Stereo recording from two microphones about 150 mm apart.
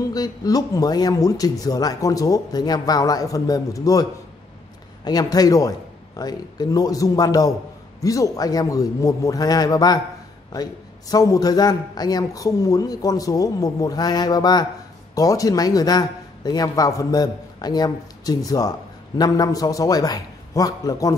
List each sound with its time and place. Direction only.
0.1 s a man's voice: 25° left (ahead or behind)